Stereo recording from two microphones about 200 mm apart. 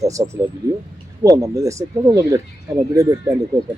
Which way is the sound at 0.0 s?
15° right (ahead or behind).